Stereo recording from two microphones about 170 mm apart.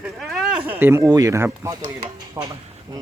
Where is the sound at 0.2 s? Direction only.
Centre (ahead or behind).